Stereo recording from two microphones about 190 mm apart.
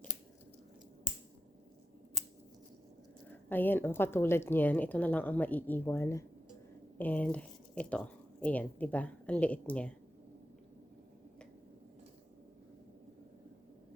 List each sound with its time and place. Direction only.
3.5 s a woman's voice: 10° left (ahead or behind)